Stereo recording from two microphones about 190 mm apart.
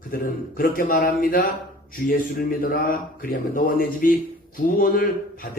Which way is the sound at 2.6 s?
45° left (ahead or behind).